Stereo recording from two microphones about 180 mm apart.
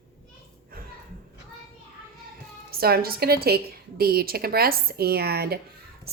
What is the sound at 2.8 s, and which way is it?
A woman's voice, 55° right (ahead or behind).